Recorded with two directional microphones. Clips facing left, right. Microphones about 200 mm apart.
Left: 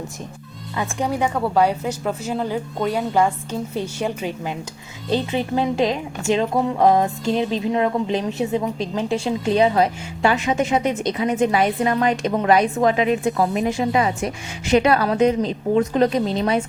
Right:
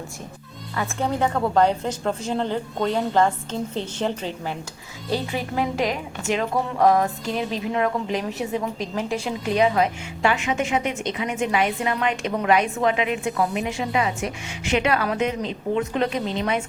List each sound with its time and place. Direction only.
0.8 s a woman's voice: 15° left (ahead or behind)
5.1 s a woman's voice: 25° left (ahead or behind)